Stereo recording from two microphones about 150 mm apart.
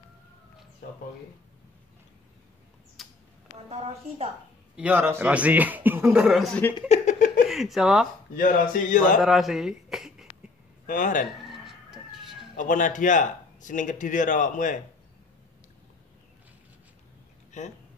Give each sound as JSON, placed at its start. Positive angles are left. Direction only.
{"t": 3.0, "sound": "mouse", "side_deg": 0}
{"t": 3.6, "sound": "a woman's voice", "side_deg": -40}
{"t": 4.7, "sound": "a man's voice", "side_deg": -10}
{"t": 6.2, "sound": "a man's voice", "side_deg": 0}
{"t": 6.9, "sound": "a sound", "side_deg": 55}
{"t": 7.4, "sound": "speech", "side_deg": 0}
{"t": 8.4, "sound": "speech", "side_deg": 65}
{"t": 9.2, "sound": "speech", "side_deg": -5}
{"t": 10.9, "sound": "speech", "side_deg": 60}
{"t": 11.2, "sound": "cat", "side_deg": 0}
{"t": 12.5, "sound": "speech", "side_deg": 60}
{"t": 17.5, "sound": "a sound", "side_deg": 50}